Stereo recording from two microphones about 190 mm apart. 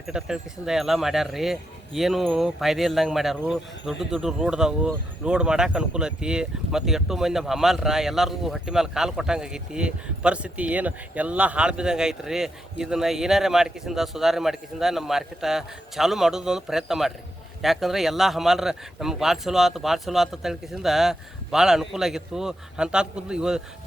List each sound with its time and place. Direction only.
0.1 s speech: 5° right (ahead or behind)